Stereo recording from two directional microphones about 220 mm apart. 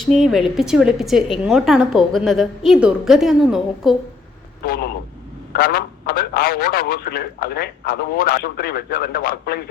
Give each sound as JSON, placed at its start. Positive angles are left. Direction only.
{"t": 0.0, "sound": "speech", "side_deg": 0}
{"t": 4.6, "sound": "a man's voice", "side_deg": 45}